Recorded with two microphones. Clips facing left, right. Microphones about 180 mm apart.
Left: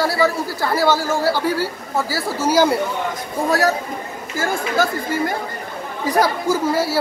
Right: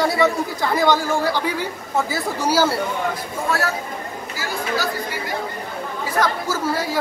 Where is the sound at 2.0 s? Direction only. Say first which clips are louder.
Left 2 dB; 20° right (ahead or behind).